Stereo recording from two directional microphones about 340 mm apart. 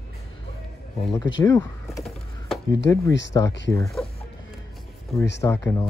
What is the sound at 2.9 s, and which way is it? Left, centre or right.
Speech, centre.